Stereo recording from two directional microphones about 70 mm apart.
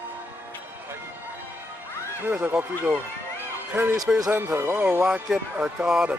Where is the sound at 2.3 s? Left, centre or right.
Right.